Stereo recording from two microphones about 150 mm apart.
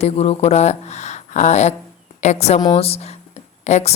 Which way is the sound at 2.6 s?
35° left (ahead or behind).